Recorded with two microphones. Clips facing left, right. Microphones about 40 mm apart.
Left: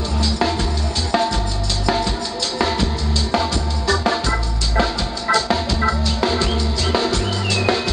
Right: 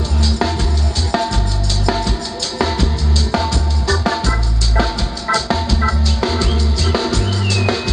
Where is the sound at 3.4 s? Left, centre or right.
Left.